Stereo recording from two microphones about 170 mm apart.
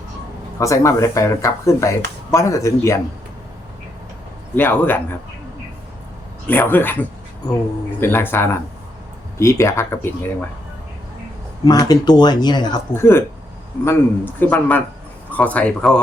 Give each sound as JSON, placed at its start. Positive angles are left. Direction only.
{"t": 0.6, "sound": "a man's voice", "side_deg": 20}
{"t": 4.5, "sound": "a man's voice", "side_deg": 10}
{"t": 6.5, "sound": "a man's voice", "side_deg": 10}
{"t": 8.0, "sound": "a man's voice", "side_deg": 10}
{"t": 11.6, "sound": "speech", "side_deg": 25}
{"t": 12.9, "sound": "a man's voice", "side_deg": 15}